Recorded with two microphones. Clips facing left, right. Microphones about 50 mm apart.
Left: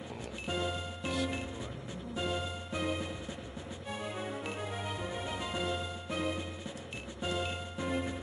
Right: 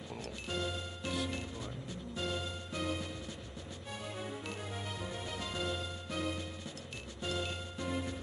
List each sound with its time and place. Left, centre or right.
0.5 s music: centre
2.1 s music: centre